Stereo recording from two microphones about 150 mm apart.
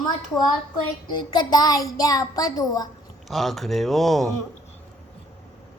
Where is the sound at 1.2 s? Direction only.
30° left (ahead or behind).